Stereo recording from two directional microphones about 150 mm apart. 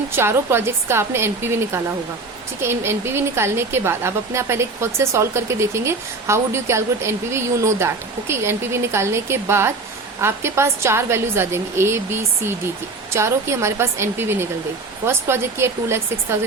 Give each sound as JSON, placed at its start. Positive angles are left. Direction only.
{"t": 0.2, "sound": "speech", "side_deg": -15}